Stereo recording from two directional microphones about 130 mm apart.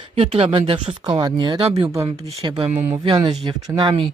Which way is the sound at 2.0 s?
50° right (ahead or behind).